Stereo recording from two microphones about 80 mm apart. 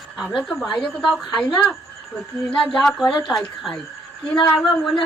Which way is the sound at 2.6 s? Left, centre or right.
Centre.